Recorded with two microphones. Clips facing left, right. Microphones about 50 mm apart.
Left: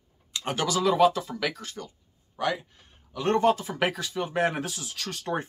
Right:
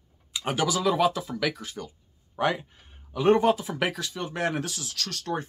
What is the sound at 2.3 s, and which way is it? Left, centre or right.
Speech, right.